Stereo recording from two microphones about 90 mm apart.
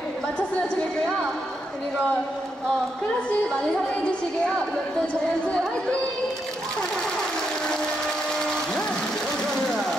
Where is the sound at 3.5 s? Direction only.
10° left (ahead or behind).